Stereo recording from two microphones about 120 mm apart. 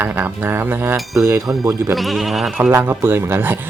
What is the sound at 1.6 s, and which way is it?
Speech, 30° right (ahead or behind).